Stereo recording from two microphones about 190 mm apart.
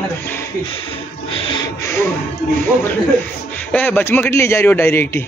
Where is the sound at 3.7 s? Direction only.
10° left (ahead or behind).